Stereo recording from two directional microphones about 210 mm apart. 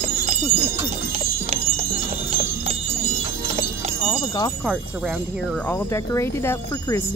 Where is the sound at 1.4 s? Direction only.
30° right (ahead or behind).